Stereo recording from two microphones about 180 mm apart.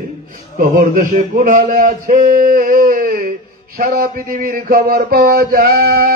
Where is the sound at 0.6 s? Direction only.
45° right (ahead or behind).